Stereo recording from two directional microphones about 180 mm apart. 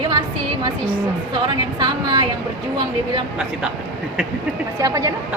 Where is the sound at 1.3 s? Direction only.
25° right (ahead or behind).